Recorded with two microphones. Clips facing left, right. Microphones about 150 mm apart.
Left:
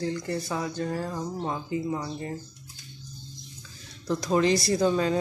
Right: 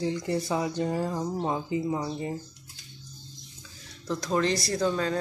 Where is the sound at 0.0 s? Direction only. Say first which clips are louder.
Right 2 dB; 20° right (ahead or behind).